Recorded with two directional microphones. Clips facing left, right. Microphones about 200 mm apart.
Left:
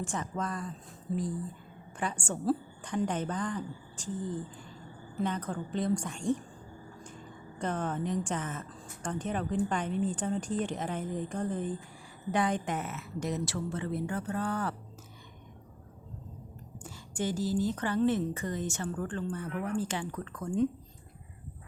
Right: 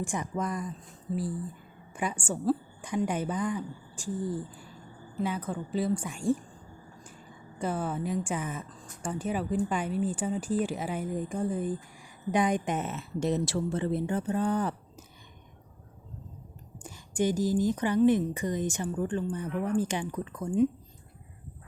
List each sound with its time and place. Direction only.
0.0 s speech: 10° right (ahead or behind)
7.6 s a woman's voice: 10° right (ahead or behind)
16.8 s speech: 15° right (ahead or behind)